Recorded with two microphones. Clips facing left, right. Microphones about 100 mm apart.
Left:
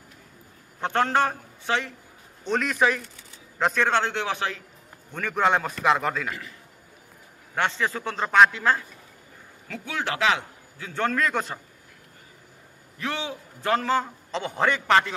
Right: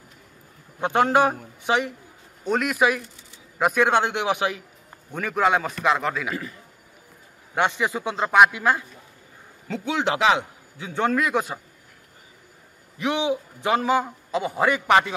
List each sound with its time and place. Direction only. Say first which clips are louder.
0.7 s a man's voice: right 4 dB; 15° right (ahead or behind)
7.5 s a man's voice: right 3 dB; 15° right (ahead or behind)
13.0 s a man's voice: right 7 dB; 15° right (ahead or behind)